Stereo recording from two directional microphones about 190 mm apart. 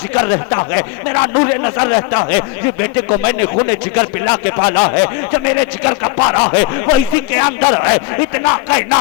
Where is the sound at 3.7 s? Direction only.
15° left (ahead or behind).